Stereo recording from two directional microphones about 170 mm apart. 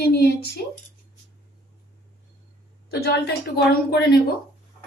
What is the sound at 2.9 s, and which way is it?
Speech, 70° left (ahead or behind).